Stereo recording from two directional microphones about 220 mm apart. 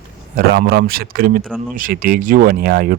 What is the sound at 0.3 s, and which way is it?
A man's voice, 40° right (ahead or behind).